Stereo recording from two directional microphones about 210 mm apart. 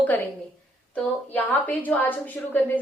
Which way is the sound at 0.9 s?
10° left (ahead or behind).